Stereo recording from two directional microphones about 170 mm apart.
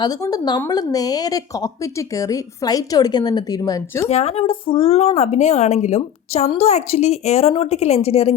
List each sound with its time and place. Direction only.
0.0 s speech: 20° left (ahead or behind)
4.1 s speech: 40° left (ahead or behind)